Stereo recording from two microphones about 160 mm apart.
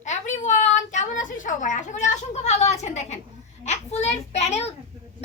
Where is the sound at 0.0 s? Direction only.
50° left (ahead or behind).